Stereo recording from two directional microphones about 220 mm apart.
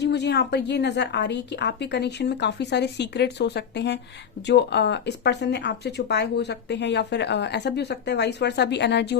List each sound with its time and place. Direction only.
0.0 s speech: 50° left (ahead or behind)